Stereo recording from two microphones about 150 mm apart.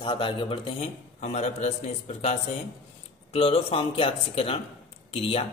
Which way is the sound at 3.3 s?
40° left (ahead or behind).